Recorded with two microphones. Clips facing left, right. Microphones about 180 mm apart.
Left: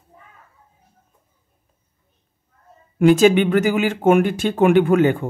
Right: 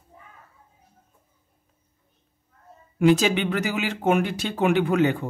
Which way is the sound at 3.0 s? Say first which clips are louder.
Left 6 dB; 50° left (ahead or behind).